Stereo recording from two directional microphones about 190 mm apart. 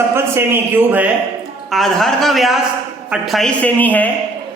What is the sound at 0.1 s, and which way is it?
A man's voice, 10° right (ahead or behind).